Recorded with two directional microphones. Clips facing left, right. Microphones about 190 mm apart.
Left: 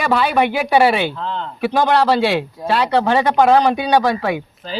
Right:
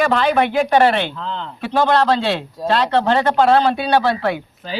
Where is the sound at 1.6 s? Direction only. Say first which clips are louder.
Left 1 dB; 10° left (ahead or behind).